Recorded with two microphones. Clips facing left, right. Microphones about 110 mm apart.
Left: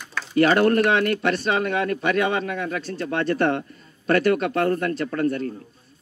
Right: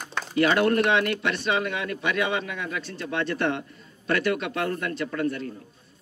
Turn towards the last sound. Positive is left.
turn(degrees=45)  # may be behind; listen again after turning